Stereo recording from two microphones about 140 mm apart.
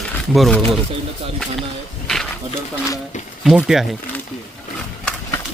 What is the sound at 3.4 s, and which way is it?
Speech, centre (ahead or behind).